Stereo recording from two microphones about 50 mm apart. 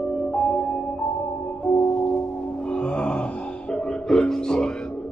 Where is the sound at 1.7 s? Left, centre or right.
Left.